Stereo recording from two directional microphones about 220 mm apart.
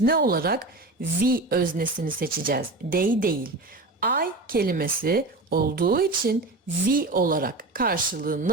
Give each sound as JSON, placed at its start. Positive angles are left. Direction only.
{"t": 0.0, "sound": "a woman's voice", "side_deg": -40}